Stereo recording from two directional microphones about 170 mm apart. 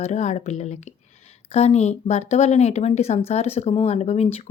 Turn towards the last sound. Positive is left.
turn(degrees=35)  # may be behind; listen again after turning